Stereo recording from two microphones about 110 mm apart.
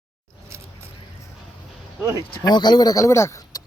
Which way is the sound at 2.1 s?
35° left (ahead or behind).